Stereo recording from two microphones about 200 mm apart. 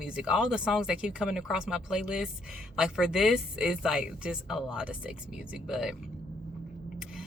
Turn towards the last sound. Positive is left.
turn(degrees=-5)  # may be behind; listen again after turning